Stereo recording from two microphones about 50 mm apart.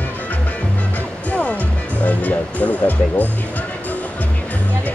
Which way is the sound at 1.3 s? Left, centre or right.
Left.